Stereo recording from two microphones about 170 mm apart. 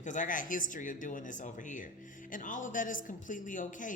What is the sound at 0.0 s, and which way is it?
A man's voice, 50° left (ahead or behind).